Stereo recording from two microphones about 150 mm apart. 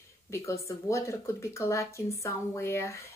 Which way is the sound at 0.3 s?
20° left (ahead or behind).